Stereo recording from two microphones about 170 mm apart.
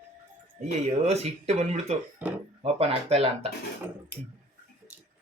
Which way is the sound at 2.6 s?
35° right (ahead or behind).